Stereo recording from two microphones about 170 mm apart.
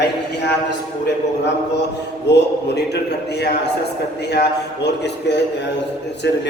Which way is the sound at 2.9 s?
75° left (ahead or behind).